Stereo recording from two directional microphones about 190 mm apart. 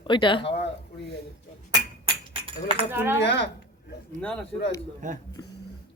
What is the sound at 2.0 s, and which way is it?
Music, 30° right (ahead or behind).